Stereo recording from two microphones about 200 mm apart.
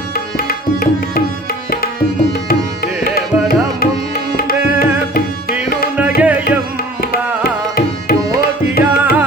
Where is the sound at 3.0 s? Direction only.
50° left (ahead or behind).